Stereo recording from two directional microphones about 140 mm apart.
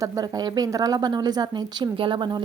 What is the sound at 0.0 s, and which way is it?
A woman's voice, 25° right (ahead or behind).